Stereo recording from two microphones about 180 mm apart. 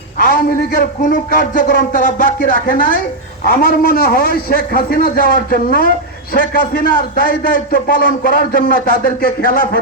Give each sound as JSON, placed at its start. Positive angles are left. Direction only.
{"t": 0.2, "sound": "a man's voice", "side_deg": 50}